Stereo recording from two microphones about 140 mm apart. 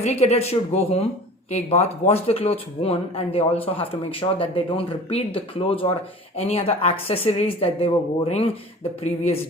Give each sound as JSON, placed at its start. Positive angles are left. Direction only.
{"t": 0.0, "sound": "speech", "side_deg": 50}